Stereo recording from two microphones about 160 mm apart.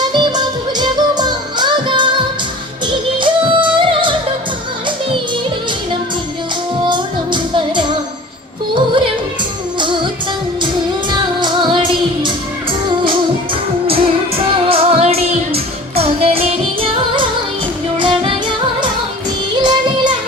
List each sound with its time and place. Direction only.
0.0 s music: 30° right (ahead or behind)
6.8 s music: 30° right (ahead or behind)
11.1 s music: 30° right (ahead or behind)